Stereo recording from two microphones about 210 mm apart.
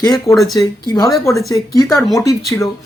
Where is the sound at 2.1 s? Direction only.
15° left (ahead or behind).